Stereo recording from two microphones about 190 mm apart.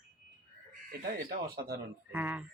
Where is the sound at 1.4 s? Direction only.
55° right (ahead or behind).